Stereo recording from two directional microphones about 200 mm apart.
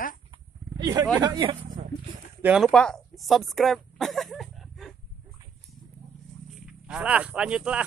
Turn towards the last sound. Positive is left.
turn(degrees=-5)  # may be behind; listen again after turning